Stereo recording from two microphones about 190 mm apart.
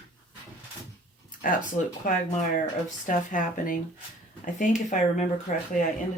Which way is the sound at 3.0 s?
45° left (ahead or behind).